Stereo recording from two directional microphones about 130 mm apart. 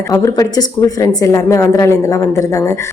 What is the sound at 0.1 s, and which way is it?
A woman's voice, 25° left (ahead or behind).